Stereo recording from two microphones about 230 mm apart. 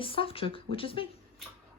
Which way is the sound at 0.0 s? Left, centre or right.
Left.